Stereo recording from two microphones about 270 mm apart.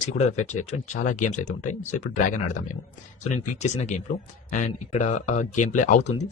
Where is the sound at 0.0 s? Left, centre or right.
Left.